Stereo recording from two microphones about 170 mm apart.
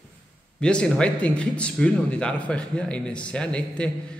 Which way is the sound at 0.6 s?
5° left (ahead or behind).